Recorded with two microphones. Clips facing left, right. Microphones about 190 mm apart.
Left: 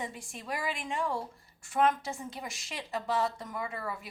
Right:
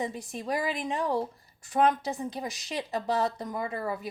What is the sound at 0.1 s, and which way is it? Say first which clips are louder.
Speech: right 7 dB; 40° right (ahead or behind).